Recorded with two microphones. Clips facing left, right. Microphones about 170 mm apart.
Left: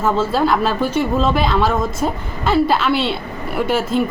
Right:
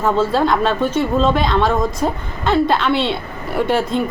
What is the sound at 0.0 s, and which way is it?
A woman's voice, 5° left (ahead or behind).